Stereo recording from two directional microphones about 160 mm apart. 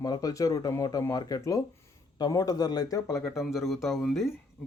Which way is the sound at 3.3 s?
Centre (ahead or behind).